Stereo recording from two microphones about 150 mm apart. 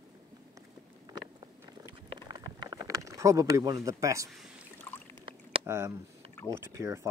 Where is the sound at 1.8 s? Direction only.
30° right (ahead or behind).